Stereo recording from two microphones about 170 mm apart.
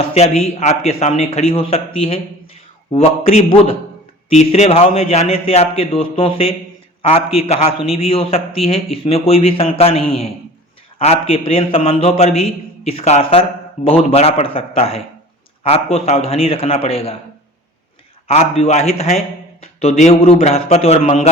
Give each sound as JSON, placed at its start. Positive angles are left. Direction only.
{"t": 0.0, "sound": "a man's voice", "side_deg": 35}
{"t": 18.3, "sound": "a man's voice", "side_deg": 35}